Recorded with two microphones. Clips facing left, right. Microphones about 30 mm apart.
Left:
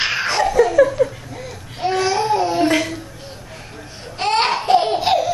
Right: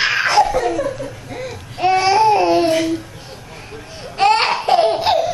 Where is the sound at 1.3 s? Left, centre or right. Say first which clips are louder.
Right 4 dB; right.